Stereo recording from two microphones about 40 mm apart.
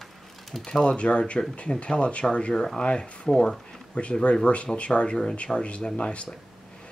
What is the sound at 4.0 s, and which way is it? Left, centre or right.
Speech, left.